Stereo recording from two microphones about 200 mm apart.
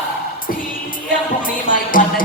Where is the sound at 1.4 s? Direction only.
45° left (ahead or behind).